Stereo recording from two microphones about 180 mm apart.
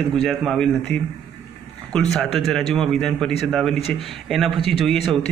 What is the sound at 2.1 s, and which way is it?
Speech, centre (ahead or behind).